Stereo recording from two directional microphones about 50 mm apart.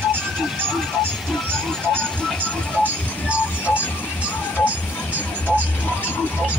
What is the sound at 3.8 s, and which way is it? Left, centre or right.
Music, left.